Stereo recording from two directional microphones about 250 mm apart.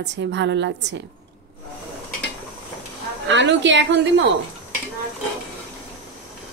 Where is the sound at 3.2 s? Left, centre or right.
Right.